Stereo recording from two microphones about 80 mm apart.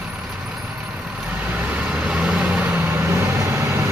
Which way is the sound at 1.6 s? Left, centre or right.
Centre.